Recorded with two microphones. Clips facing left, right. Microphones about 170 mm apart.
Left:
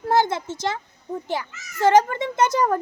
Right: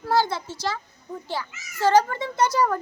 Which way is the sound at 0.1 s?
20° left (ahead or behind).